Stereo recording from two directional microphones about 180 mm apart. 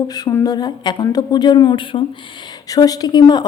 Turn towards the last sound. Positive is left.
turn(degrees=25)  # may be behind; listen again after turning